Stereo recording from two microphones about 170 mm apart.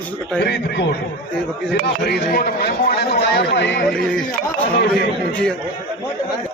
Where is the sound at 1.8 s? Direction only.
70° left (ahead or behind); by 3.8 s 85° left.